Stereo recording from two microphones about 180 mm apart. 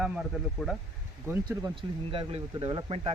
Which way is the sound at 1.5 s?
25° right (ahead or behind).